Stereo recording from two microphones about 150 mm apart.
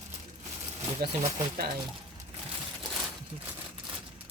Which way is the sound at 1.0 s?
90° right.